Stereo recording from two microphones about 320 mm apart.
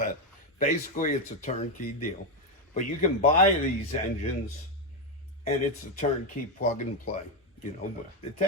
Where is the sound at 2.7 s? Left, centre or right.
Left.